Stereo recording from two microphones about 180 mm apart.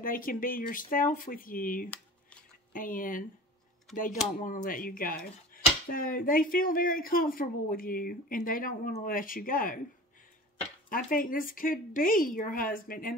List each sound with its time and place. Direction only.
0.0 s speech: 50° left (ahead or behind)
4.4 s speech: 50° left (ahead or behind)
10.9 s speech: 50° left (ahead or behind)